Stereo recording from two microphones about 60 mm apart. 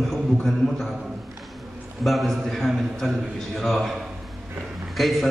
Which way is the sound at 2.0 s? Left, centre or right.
Centre.